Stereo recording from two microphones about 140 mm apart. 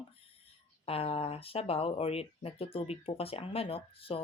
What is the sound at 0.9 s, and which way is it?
Speech, 45° left (ahead or behind).